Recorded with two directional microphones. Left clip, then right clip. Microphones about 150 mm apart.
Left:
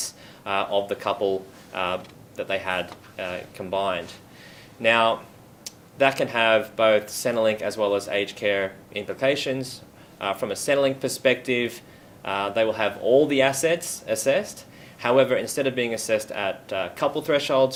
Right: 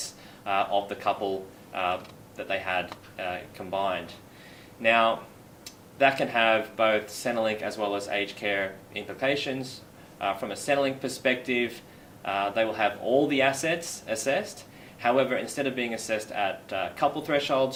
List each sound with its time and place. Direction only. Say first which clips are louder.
0.0 s speech: left 2 dB; 40° left (ahead or behind)